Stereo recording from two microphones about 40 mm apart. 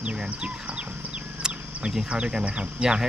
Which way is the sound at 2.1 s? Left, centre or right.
Right.